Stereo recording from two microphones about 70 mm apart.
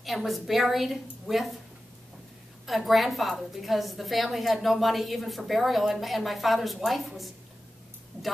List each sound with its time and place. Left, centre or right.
0.0 s a woman's voice: centre
2.6 s a woman's voice: centre